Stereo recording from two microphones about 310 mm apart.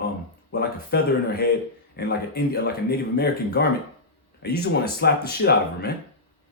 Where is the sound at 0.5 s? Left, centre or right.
Left.